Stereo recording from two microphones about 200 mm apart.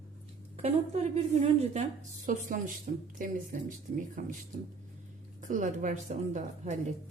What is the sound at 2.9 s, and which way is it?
Speech, 45° right (ahead or behind).